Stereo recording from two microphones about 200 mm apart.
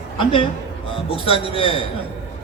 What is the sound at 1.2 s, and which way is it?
Speech, 25° left (ahead or behind).